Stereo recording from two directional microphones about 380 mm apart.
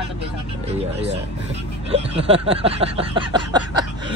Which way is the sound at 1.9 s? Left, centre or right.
Centre.